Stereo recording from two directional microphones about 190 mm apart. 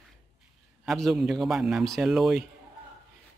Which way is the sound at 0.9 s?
Centre (ahead or behind).